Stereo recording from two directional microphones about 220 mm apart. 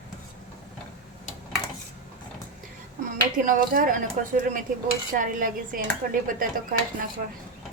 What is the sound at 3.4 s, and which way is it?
A woman's voice, 35° right (ahead or behind).